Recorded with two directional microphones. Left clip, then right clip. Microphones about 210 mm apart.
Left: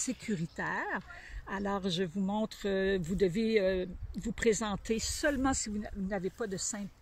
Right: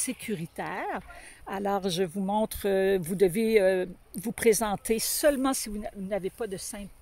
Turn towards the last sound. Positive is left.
turn(degrees=-25)  # may be behind; listen again after turning